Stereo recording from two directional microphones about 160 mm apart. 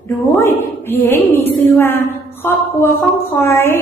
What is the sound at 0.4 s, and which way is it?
Speech, 15° left (ahead or behind).